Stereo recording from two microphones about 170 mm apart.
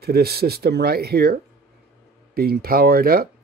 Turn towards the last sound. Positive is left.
turn(degrees=-60)  # may be behind; listen again after turning